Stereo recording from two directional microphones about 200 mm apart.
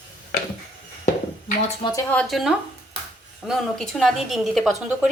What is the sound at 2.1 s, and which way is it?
A woman's voice, 5° left (ahead or behind).